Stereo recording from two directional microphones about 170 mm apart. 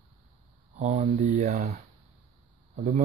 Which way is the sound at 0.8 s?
45° right (ahead or behind).